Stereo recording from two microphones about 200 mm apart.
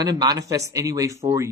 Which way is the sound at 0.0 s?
20° right (ahead or behind).